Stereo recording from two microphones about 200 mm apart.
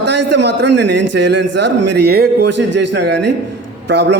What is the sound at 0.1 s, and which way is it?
A man's voice, 60° right (ahead or behind).